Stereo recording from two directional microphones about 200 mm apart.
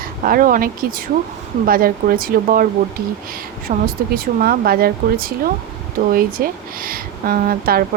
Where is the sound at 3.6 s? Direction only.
45° right (ahead or behind).